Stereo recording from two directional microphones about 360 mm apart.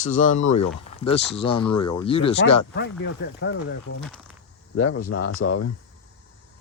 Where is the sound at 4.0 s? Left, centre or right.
Centre.